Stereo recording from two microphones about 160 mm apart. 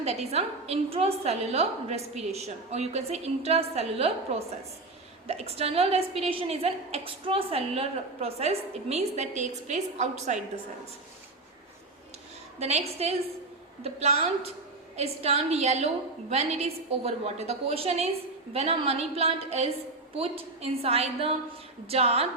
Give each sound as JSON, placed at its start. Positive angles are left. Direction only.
{"t": 0.0, "sound": "a woman's voice", "side_deg": -40}
{"t": 12.5, "sound": "a woman's voice", "side_deg": -45}